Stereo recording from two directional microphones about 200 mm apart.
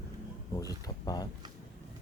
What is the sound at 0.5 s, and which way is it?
Speech, 20° left (ahead or behind).